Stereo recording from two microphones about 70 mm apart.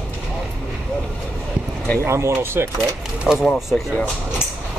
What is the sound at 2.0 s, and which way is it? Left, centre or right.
Speech, right.